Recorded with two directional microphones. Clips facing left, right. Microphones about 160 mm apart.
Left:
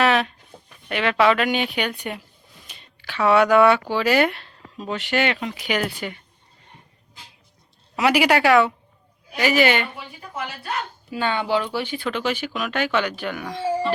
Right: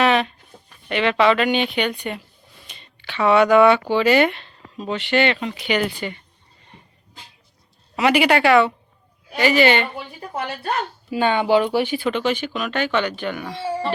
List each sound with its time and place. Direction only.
0.0 s a sound: 5° left (ahead or behind)
0.9 s speech: 5° left (ahead or behind)
7.9 s a woman's voice: 5° left (ahead or behind)
11.1 s speech: 15° right (ahead or behind)
11.9 s speech: centre (ahead or behind)